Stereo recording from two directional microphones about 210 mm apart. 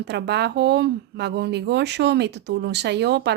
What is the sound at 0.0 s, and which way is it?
Speech, 55° right (ahead or behind).